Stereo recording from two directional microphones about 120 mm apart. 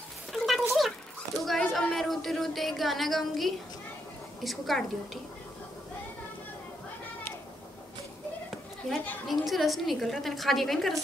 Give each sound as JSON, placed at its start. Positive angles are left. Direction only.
{"t": 0.3, "sound": "a sound", "side_deg": 0}
{"t": 1.4, "sound": "a woman's voice", "side_deg": 0}
{"t": 9.3, "sound": "a woman's voice", "side_deg": 0}